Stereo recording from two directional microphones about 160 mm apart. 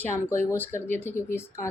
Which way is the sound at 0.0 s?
15° left (ahead or behind).